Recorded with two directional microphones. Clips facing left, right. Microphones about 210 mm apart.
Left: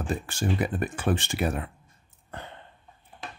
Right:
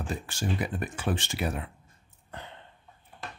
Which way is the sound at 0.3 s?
55° left (ahead or behind).